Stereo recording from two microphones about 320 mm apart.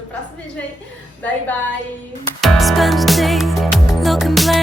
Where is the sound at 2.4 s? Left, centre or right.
Centre.